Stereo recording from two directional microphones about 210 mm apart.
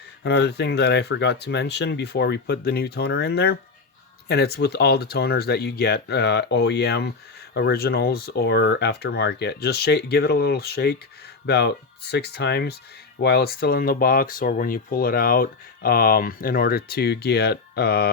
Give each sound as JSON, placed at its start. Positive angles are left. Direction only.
{"t": 0.2, "sound": "speech", "side_deg": 50}